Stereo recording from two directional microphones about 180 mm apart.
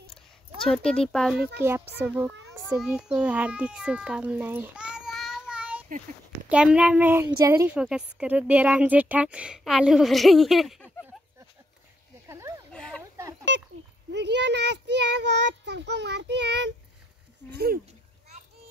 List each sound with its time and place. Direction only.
0.7 s a woman's voice: 5° left (ahead or behind)
2.0 s a woman's voice: 10° right (ahead or behind)
3.2 s child singing: 10° right (ahead or behind)
6.5 s a woman's voice: 5° right (ahead or behind)
12.3 s a sound: 15° right (ahead or behind)
12.7 s a sound: 5° left (ahead or behind)
14.1 s a child's voice: 70° right (ahead or behind)
17.5 s speech: 60° right (ahead or behind)